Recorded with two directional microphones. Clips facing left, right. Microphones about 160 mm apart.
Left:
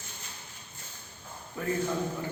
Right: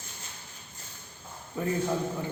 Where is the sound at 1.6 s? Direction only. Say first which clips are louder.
Right 2 dB; 20° right (ahead or behind).